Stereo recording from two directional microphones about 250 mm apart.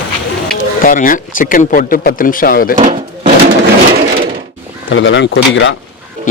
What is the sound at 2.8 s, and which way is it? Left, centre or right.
Drawer open or close, right.